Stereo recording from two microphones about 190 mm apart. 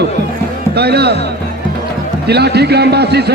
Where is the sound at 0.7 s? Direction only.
60° right (ahead or behind).